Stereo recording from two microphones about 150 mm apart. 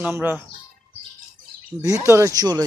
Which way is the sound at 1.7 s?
20° right (ahead or behind).